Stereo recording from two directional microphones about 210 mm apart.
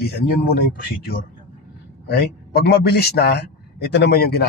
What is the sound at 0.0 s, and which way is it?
A man's voice, 45° left (ahead or behind).